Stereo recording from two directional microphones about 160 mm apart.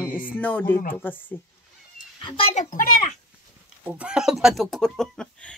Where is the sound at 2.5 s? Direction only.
50° left (ahead or behind).